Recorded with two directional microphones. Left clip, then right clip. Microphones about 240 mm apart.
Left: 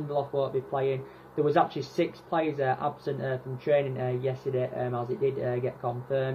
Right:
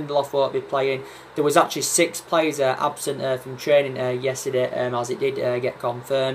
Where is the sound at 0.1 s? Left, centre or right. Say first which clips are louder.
Right 7 dB; centre.